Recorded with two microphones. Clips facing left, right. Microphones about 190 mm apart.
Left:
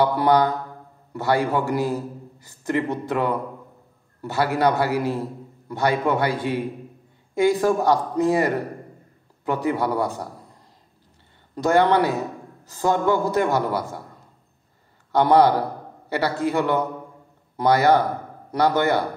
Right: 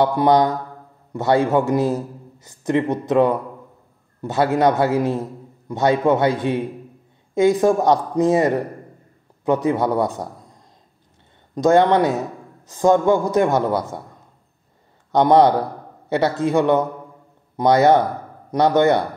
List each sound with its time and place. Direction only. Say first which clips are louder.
0.0 s a man's voice: right 3 dB; 20° right (ahead or behind)
11.5 s a man's voice: right 3 dB; 20° right (ahead or behind)
15.0 s a man's voice: right 3 dB; 20° right (ahead or behind)